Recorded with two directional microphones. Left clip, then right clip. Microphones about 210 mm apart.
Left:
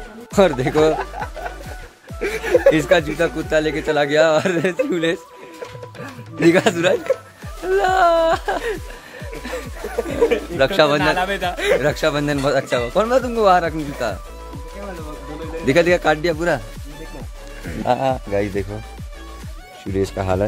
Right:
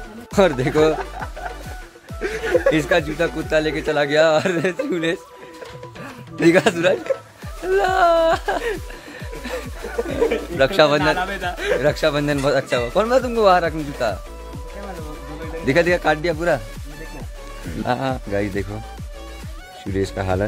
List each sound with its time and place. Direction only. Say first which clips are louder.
0.3 s a man's voice: left 1 dB; centre (ahead or behind)
2.7 s a man's voice: left 3 dB; 10° left (ahead or behind)
6.4 s a man's voice: even; centre (ahead or behind)
9.4 s a sound: left 1 dB; centre (ahead or behind)
11.1 s a man's voice: left 3 dB; 50° left (ahead or behind)
11.8 s a man's voice: even; centre (ahead or behind)
15.6 s a man's voice: left 2 dB; 5° left (ahead or behind)
17.8 s a man's voice: left 4 dB; 5° right (ahead or behind)
19.8 s a man's voice: left 2 dB; centre (ahead or behind)